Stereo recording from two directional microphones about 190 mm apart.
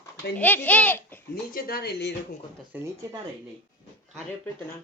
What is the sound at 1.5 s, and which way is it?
Speech, 50° left (ahead or behind).